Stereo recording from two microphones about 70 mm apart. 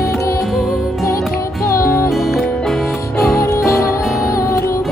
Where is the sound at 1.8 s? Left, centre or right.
Left.